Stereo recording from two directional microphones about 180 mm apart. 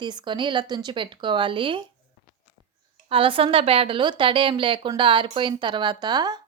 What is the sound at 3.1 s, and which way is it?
A woman's voice, 30° right (ahead or behind).